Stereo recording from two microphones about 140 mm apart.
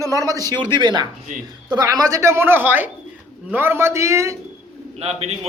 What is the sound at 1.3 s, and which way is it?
Speech, 70° right (ahead or behind).